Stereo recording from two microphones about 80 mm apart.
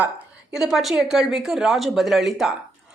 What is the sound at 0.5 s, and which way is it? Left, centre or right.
A woman's voice, centre.